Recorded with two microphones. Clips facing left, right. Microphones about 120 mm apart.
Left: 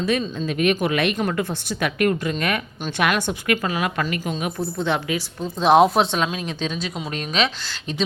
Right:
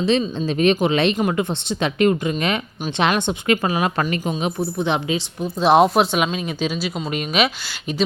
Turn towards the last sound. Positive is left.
turn(degrees=-10)  # may be behind; listen again after turning